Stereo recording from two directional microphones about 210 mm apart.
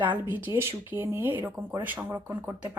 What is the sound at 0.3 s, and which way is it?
Speech, 10° right (ahead or behind).